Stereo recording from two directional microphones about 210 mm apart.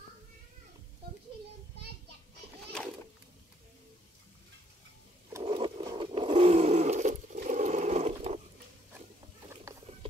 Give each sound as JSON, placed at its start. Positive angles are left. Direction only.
{"t": 5.4, "sound": "roar", "side_deg": -25}